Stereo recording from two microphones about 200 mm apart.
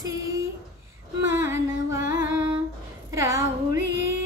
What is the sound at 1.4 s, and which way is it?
Music, 15° right (ahead or behind).